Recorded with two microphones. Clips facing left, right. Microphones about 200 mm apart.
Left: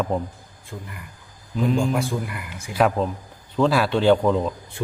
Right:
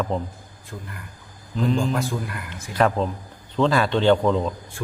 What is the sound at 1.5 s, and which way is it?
A man's voice, 10° left (ahead or behind).